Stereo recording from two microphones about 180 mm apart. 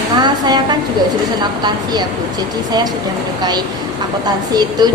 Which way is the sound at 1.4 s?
20° right (ahead or behind).